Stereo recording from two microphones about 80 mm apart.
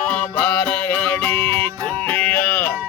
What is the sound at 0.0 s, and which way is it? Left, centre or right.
Music, centre.